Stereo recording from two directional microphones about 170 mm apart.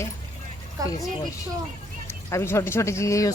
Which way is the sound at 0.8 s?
20° right (ahead or behind).